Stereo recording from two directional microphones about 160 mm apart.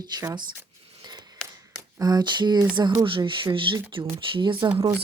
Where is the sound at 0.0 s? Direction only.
20° right (ahead or behind).